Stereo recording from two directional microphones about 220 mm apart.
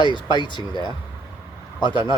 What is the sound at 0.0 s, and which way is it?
Speech, 20° left (ahead or behind).